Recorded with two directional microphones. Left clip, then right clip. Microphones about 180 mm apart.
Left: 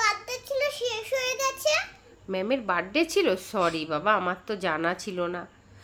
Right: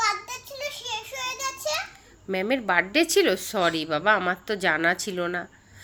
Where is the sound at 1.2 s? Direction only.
25° left (ahead or behind).